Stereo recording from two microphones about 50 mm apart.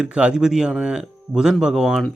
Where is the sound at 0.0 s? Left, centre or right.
Right.